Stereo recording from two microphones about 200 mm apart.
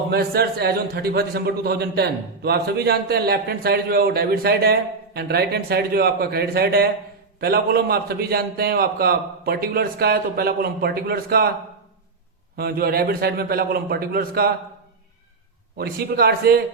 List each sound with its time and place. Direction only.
0.1 s a man's voice: 50° right (ahead or behind)
12.5 s a man's voice: 50° right (ahead or behind)
15.8 s a man's voice: 50° right (ahead or behind)